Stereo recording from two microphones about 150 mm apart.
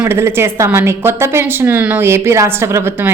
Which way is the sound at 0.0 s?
15° right (ahead or behind).